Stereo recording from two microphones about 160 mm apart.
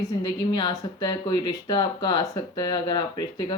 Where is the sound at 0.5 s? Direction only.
25° left (ahead or behind).